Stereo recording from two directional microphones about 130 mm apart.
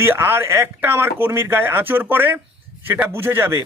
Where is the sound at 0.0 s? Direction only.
20° right (ahead or behind).